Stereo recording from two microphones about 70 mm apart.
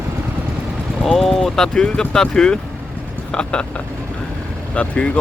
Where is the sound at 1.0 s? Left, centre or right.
Centre.